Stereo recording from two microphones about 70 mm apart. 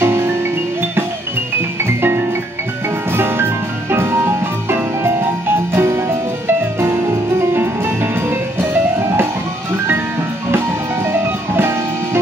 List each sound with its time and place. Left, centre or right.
0.0 s music: right
1.9 s music: right
11.1 s music: right